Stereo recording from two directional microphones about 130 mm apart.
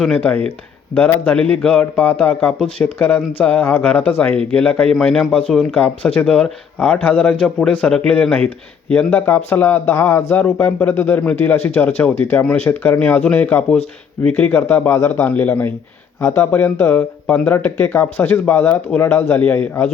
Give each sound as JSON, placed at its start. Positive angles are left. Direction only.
{"t": 0.0, "sound": "a man's voice", "side_deg": 10}